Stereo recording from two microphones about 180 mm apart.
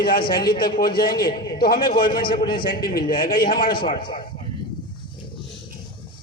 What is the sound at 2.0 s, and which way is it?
Speech, 25° left (ahead or behind).